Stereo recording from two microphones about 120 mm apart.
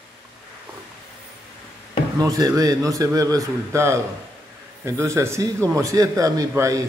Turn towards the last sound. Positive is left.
turn(degrees=-25)  # may be behind; listen again after turning